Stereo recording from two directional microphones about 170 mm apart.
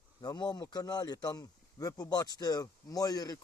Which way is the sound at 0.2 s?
25° left (ahead or behind).